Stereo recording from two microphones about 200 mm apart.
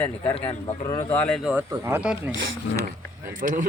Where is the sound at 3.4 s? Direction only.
40° right (ahead or behind).